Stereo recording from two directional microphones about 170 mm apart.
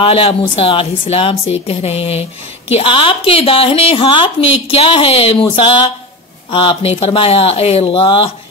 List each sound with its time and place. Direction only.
0.0 s a woman's voice: 30° left (ahead or behind)